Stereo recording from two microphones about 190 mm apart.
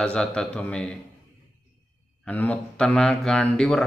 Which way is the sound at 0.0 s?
5° left (ahead or behind).